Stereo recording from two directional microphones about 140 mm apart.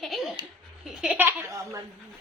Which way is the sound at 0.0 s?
Centre (ahead or behind).